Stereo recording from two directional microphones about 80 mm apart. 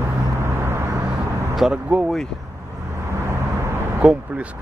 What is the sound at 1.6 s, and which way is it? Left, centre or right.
Speech, centre.